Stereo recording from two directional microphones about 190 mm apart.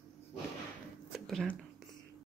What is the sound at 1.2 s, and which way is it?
Whispering, centre (ahead or behind).